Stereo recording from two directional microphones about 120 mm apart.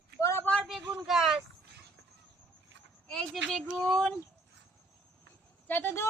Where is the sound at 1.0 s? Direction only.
Centre (ahead or behind).